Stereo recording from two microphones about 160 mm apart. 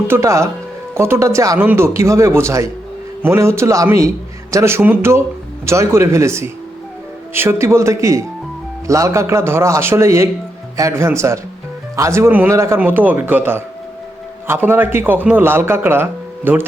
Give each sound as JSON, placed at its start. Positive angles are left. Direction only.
{"t": 0.1, "sound": "a man's voice", "side_deg": -20}